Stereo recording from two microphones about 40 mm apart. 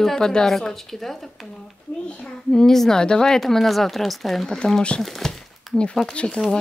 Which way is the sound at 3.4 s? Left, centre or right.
Centre.